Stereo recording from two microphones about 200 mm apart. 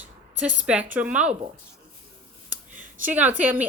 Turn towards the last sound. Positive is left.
turn(degrees=-10)  # may be behind; listen again after turning